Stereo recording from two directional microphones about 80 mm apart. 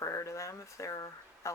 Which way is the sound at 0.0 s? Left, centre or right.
Left.